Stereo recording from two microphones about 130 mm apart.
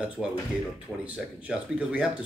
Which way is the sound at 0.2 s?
5° right (ahead or behind).